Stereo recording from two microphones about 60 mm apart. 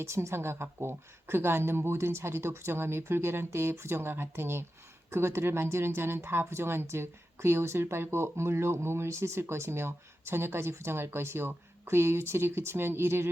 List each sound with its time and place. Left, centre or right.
0.0 s speech: right